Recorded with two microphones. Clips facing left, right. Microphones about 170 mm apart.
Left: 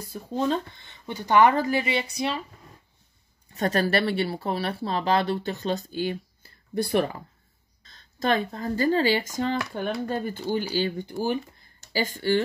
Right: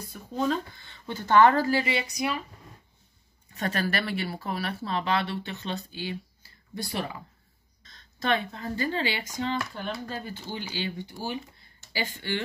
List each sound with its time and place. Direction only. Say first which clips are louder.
0.0 s speech: left 6 dB; 35° left (ahead or behind)
0.5 s speech: left 2 dB; 20° left (ahead or behind)
3.5 s speech: left 6 dB; 35° left (ahead or behind); by 7.2 s 60° left (ahead or behind)
7.8 s speech: left 4 dB; 35° left (ahead or behind)